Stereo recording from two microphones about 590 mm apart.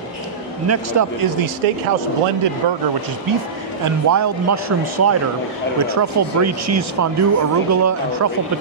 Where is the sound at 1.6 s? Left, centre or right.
Right.